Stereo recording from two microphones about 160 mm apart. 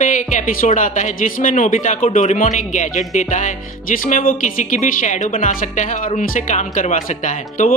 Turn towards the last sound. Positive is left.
turn(degrees=55)  # may be behind; listen again after turning